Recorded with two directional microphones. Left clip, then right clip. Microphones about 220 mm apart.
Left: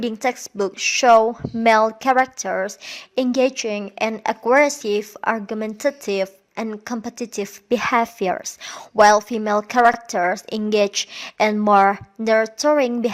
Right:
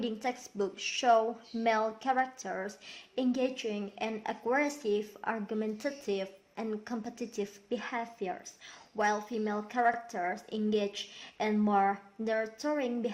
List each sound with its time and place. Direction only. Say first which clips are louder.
0.0 s a woman's voice: left 12 dB; 40° left (ahead or behind)